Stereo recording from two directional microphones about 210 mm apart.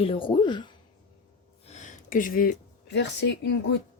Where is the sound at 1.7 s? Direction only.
35° left (ahead or behind); by 3.6 s 55° left (ahead or behind).